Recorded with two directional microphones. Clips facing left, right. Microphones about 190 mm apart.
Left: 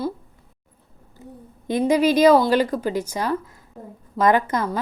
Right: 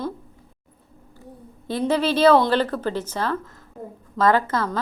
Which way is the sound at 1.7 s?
15° left (ahead or behind).